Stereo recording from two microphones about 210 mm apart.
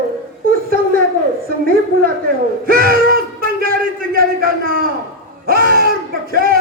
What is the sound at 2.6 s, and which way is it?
Speech, 45° right (ahead or behind).